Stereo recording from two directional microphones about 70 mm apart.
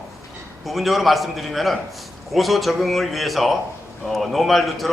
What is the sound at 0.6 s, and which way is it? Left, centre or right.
A man's voice, centre.